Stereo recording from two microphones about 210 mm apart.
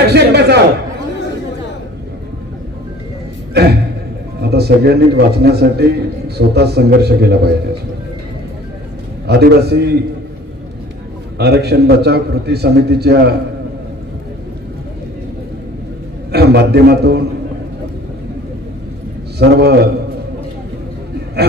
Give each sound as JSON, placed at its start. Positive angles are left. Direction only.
{"t": 0.0, "sound": "a man's voice", "side_deg": -50}
{"t": 3.5, "sound": "a man's voice", "side_deg": -50}
{"t": 9.3, "sound": "a man's voice", "side_deg": -50}
{"t": 11.3, "sound": "a man's voice", "side_deg": -50}
{"t": 16.3, "sound": "a man's voice", "side_deg": -50}
{"t": 19.3, "sound": "a man's voice", "side_deg": -50}
{"t": 21.4, "sound": "a sound", "side_deg": -50}